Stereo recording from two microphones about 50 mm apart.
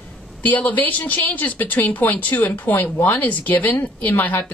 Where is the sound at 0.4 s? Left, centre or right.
Left.